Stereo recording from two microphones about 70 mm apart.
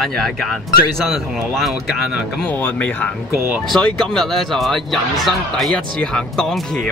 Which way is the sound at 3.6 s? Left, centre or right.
Centre.